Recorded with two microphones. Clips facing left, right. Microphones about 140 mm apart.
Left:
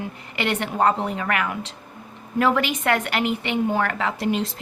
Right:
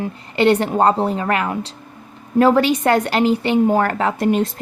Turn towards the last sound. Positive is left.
turn(degrees=-50)  # may be behind; listen again after turning